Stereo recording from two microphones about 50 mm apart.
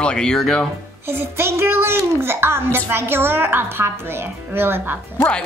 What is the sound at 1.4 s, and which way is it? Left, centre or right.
A woman's voice, right.